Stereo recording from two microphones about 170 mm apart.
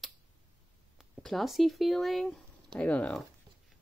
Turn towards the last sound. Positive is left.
turn(degrees=5)  # may be behind; listen again after turning